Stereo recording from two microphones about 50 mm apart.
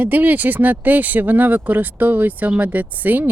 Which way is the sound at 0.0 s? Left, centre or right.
Right.